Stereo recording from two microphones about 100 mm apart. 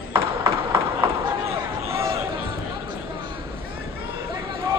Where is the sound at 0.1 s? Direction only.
25° right (ahead or behind).